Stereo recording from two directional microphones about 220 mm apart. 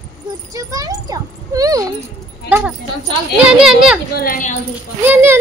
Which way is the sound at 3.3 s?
5° right (ahead or behind).